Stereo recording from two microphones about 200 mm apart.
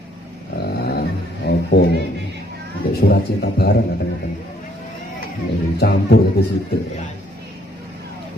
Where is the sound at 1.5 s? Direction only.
55° left (ahead or behind).